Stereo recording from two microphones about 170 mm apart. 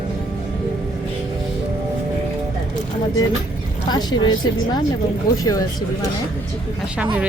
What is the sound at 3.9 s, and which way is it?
Speech, 25° left (ahead or behind).